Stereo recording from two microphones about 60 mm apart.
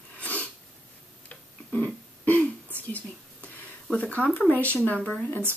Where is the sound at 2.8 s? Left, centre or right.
Left.